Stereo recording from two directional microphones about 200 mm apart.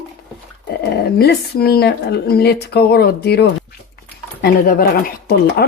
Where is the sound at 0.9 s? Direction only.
55° left (ahead or behind).